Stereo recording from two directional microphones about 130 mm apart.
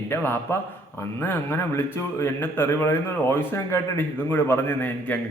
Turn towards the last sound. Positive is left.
turn(degrees=15)  # may be behind; listen again after turning